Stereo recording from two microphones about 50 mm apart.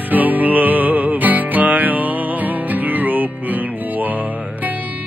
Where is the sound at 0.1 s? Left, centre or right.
Right.